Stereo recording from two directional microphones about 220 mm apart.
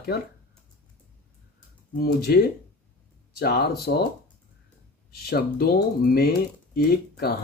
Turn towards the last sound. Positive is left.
turn(degrees=45)  # may be behind; listen again after turning